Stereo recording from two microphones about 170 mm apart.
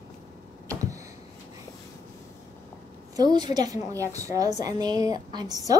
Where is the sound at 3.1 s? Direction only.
25° right (ahead or behind).